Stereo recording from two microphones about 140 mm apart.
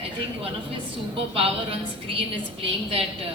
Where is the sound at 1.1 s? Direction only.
45° right (ahead or behind).